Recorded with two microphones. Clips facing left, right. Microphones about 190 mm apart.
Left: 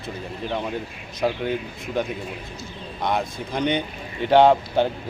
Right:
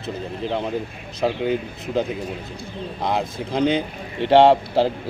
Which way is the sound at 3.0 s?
30° right (ahead or behind).